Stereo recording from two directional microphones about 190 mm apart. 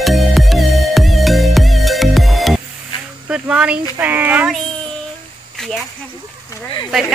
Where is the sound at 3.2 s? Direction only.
5° right (ahead or behind).